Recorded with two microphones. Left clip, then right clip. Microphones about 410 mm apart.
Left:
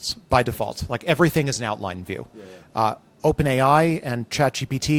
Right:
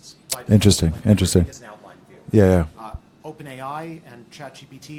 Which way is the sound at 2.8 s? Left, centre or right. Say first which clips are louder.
Left 16 dB; left.